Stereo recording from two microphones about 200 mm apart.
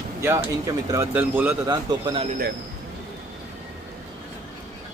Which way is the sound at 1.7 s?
20° right (ahead or behind).